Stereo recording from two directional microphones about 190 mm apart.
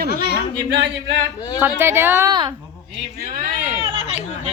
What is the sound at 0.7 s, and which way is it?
Speech, 70° right (ahead or behind).